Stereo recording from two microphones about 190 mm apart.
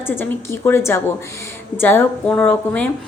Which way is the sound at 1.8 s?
10° left (ahead or behind).